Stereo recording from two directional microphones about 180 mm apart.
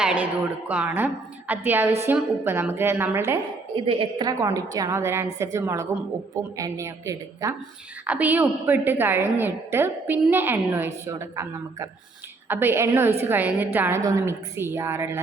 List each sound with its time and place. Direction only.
0.0 s a woman's voice: 5° right (ahead or behind)
3.8 s a woman's voice: 30° right (ahead or behind); by 15.2 s 15° right (ahead or behind)